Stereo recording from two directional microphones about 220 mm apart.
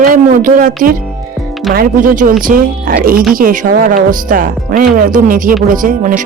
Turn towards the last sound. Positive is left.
turn(degrees=-35)  # may be behind; listen again after turning